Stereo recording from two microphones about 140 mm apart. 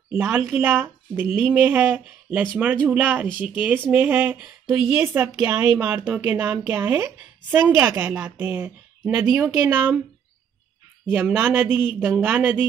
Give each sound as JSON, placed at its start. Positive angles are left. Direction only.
{"t": 0.1, "sound": "a woman's voice", "side_deg": -10}
{"t": 5.0, "sound": "a woman's voice", "side_deg": -15}
{"t": 11.1, "sound": "a woman's voice", "side_deg": -15}